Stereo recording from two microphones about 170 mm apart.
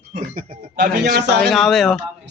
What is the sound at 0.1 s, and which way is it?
Speech, 50° right (ahead or behind).